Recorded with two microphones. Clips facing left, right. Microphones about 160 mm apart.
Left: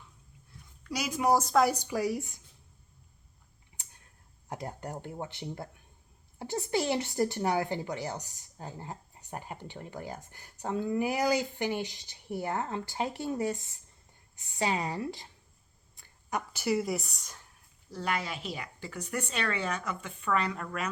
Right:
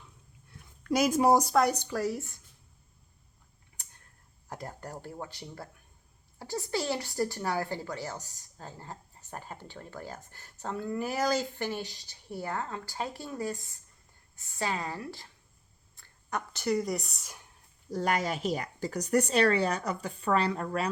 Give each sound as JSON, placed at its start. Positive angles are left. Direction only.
{"t": 0.9, "sound": "a woman's voice", "side_deg": -50}
{"t": 1.5, "sound": "a woman's voice", "side_deg": 5}
{"t": 4.4, "sound": "speech", "side_deg": 20}
{"t": 17.8, "sound": "speech", "side_deg": -45}